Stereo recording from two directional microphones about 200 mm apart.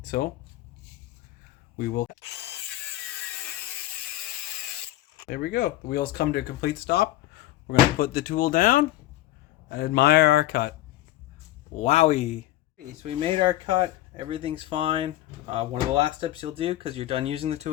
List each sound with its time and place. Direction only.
0.0 s speech: 45° left (ahead or behind)
1.8 s speech: 45° left (ahead or behind)
5.3 s speech: 45° left (ahead or behind)
11.8 s speech: 35° left (ahead or behind)
13.0 s speech: 30° right (ahead or behind)